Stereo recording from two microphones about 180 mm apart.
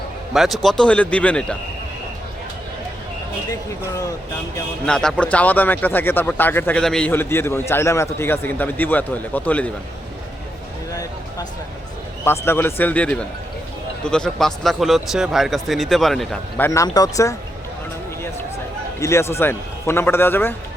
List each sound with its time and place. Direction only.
0.3 s speech: centre (ahead or behind)
4.9 s speech: 5° left (ahead or behind)
12.2 s speech: 15° left (ahead or behind)
16.6 s speech: 20° left (ahead or behind)
18.9 s speech: 15° left (ahead or behind)